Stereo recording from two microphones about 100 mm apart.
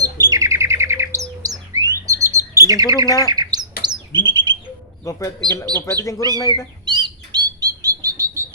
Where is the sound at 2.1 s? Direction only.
30° right (ahead or behind).